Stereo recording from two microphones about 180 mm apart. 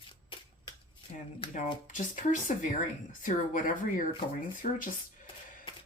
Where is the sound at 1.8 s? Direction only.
45° left (ahead or behind).